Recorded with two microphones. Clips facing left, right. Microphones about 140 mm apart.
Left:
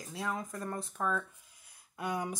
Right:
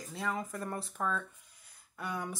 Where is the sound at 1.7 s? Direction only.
15° left (ahead or behind).